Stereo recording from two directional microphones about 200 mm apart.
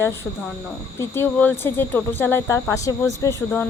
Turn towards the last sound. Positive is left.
turn(degrees=15)  # may be behind; listen again after turning